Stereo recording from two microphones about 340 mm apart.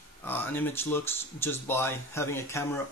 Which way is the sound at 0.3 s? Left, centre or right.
Centre.